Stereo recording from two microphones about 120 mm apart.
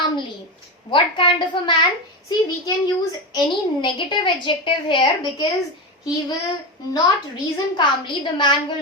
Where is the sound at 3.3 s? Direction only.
40° left (ahead or behind).